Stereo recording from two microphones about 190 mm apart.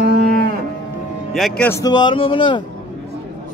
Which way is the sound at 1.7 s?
20° left (ahead or behind).